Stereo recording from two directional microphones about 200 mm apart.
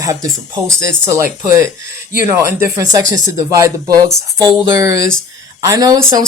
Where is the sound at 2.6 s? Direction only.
15° right (ahead or behind).